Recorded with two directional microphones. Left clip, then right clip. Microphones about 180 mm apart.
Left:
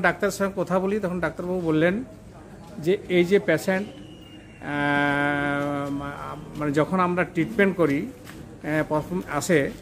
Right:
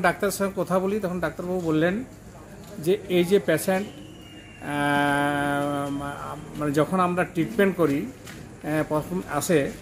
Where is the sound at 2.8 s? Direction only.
Centre (ahead or behind).